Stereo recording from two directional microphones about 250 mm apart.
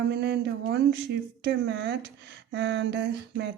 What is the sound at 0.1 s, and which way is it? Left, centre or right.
Speech, right.